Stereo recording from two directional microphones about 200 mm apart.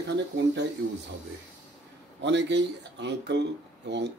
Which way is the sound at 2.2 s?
60° right (ahead or behind).